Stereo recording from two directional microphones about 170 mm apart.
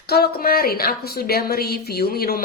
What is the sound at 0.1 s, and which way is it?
A woman's voice, 65° left (ahead or behind).